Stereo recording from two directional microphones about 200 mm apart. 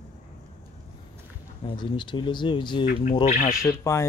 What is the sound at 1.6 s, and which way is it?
Speech, 25° left (ahead or behind).